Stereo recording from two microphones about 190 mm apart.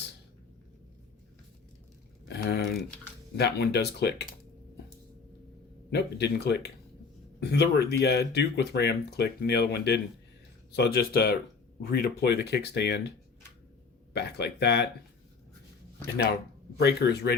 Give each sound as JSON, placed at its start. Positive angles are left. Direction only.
{"t": 2.2, "sound": "a sound", "side_deg": 60}
{"t": 3.3, "sound": "speech", "side_deg": 60}
{"t": 5.9, "sound": "speech", "side_deg": 60}
{"t": 14.1, "sound": "speech", "side_deg": 60}
{"t": 16.7, "sound": "speech", "side_deg": 60}